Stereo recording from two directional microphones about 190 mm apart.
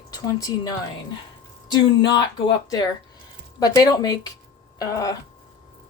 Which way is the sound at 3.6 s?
20° left (ahead or behind).